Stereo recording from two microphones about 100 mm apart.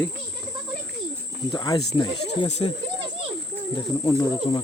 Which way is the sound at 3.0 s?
70° right (ahead or behind).